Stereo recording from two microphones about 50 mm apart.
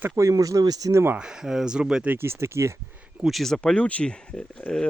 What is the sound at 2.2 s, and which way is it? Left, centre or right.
Speech, right.